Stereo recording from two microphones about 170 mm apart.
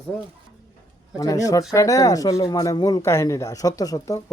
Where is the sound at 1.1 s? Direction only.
20° left (ahead or behind).